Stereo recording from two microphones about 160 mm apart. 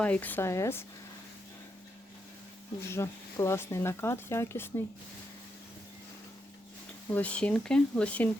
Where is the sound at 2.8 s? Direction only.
15° left (ahead or behind).